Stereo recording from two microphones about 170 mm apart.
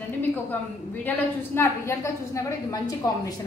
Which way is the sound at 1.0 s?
10° left (ahead or behind).